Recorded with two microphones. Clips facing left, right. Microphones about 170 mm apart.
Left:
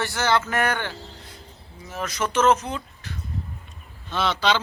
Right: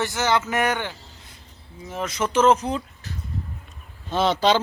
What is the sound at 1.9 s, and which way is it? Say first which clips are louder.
A man's voice: right 2 dB; 25° right (ahead or behind).